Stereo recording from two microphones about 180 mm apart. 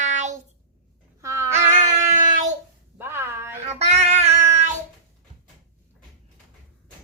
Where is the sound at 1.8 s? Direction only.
40° right (ahead or behind).